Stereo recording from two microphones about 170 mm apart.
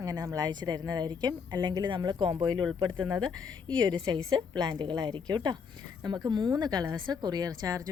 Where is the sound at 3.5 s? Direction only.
25° right (ahead or behind).